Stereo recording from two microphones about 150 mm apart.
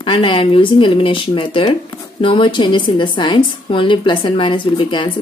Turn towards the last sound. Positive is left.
turn(degrees=30)  # may be behind; listen again after turning